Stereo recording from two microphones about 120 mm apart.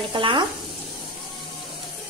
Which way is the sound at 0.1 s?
45° right (ahead or behind).